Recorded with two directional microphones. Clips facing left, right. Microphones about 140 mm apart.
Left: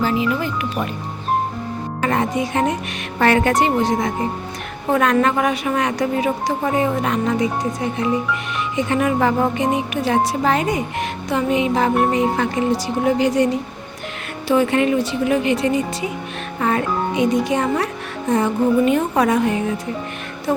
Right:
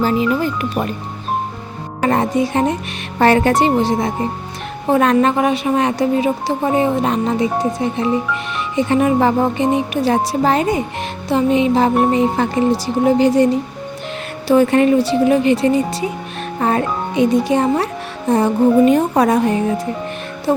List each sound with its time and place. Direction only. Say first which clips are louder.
0.0 s speech: right 3 dB; 35° right (ahead or behind)
2.0 s a woman's voice: right 4 dB; 35° right (ahead or behind)